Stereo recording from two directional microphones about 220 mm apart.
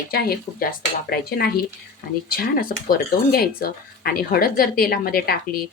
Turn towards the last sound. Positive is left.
turn(degrees=40)  # may be behind; listen again after turning